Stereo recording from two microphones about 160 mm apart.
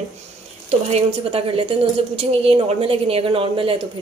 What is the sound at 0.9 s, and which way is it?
A woman's voice, 40° right (ahead or behind).